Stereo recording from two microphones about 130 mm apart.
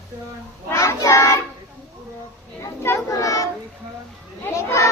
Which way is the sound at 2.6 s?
20° left (ahead or behind).